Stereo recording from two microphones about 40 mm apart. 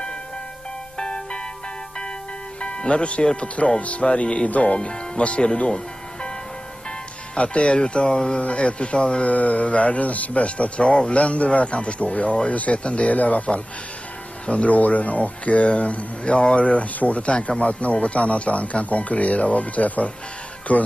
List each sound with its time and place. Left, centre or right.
0.9 s music: left
2.6 s speech: left
7.3 s speech: left
9.2 s speech: left